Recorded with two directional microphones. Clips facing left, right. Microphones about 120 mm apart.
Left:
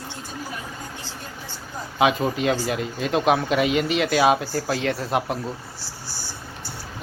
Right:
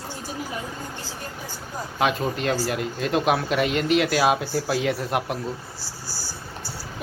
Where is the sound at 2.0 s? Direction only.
5° left (ahead or behind).